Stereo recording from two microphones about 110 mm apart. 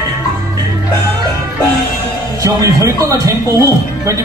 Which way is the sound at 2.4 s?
30° right (ahead or behind).